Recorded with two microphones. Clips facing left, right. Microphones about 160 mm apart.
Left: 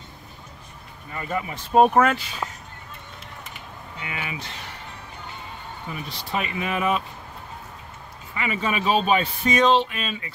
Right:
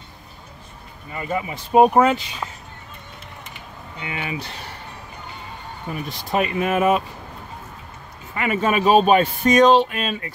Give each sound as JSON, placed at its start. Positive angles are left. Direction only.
{"t": 1.1, "sound": "speech", "side_deg": -10}
{"t": 4.0, "sound": "speech", "side_deg": -30}
{"t": 6.0, "sound": "speech", "side_deg": -45}
{"t": 8.4, "sound": "speech", "side_deg": -50}